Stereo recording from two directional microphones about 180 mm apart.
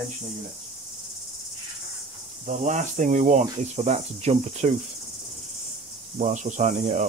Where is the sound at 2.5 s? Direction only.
45° right (ahead or behind).